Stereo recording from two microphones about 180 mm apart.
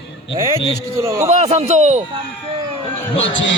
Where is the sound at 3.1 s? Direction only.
90° left.